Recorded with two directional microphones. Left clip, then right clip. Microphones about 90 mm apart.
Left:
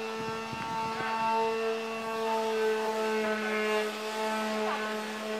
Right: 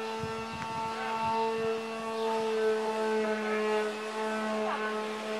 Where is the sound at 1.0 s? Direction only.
25° left (ahead or behind).